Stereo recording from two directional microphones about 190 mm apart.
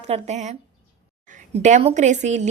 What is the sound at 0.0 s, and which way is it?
A woman's voice, 35° right (ahead or behind).